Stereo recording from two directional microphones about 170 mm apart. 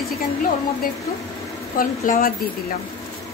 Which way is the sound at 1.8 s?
55° left (ahead or behind).